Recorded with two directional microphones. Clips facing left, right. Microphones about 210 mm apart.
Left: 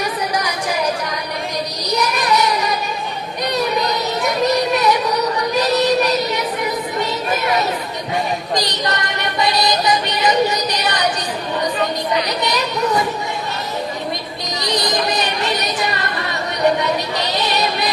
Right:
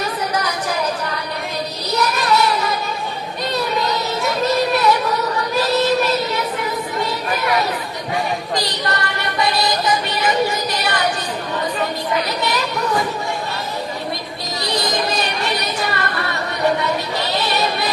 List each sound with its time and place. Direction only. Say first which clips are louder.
1.9 s child singing: even; 15° left (ahead or behind)
8.5 s music: left 2 dB; 20° left (ahead or behind)
12.4 s children playing: left 1 dB; 20° left (ahead or behind)
14.6 s a sound: left 1 dB; 20° left (ahead or behind)
16.8 s child singing: left 1 dB; 20° left (ahead or behind)